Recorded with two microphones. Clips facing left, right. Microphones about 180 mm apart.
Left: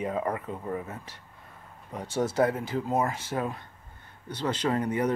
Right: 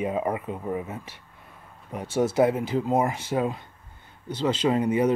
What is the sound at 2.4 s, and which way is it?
Speech, 20° right (ahead or behind).